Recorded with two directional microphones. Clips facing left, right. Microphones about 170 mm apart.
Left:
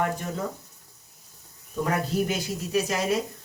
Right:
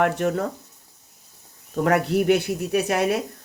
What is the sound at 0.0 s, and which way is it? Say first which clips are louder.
Speech: right 7 dB; 70° right (ahead or behind).